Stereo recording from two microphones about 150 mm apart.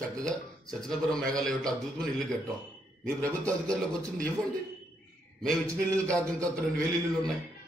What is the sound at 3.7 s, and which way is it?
Speech, 5° left (ahead or behind).